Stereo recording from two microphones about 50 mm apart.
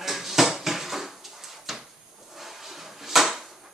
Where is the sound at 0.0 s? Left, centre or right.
Centre.